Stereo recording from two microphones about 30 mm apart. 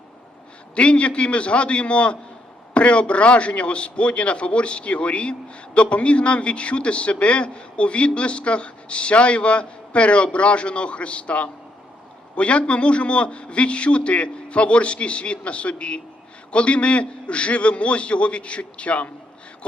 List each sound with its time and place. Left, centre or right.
0.8 s a man's voice: left